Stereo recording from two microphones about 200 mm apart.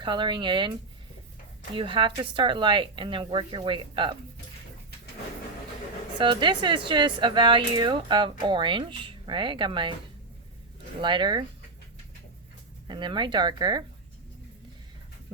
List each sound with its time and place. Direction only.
0.0 s speech: 25° right (ahead or behind)
6.1 s speech: 25° right (ahead or behind)
11.0 s speech: 25° right (ahead or behind)
12.9 s speech: 25° right (ahead or behind)